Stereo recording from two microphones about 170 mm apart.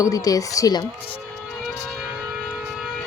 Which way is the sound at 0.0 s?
20° left (ahead or behind).